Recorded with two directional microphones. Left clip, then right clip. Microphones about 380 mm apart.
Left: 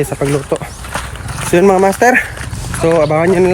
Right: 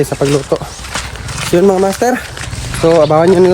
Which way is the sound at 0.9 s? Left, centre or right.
Centre.